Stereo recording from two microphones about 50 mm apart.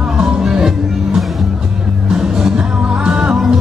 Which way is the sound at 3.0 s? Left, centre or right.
Right.